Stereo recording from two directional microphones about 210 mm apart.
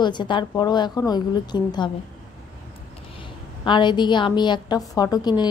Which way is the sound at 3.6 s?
20° left (ahead or behind).